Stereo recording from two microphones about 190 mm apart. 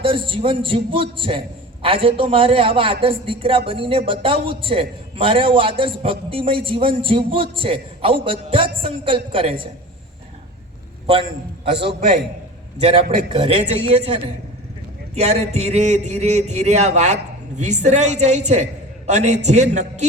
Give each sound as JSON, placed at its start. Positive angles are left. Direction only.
{"t": 0.0, "sound": "a man's voice", "side_deg": -25}
{"t": 11.0, "sound": "a man's voice", "side_deg": -30}
{"t": 11.9, "sound": "a man's voice", "side_deg": -50}
{"t": 12.8, "sound": "a man's voice", "side_deg": -30}